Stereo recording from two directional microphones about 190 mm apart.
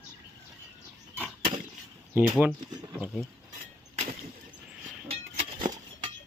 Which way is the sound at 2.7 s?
20° right (ahead or behind).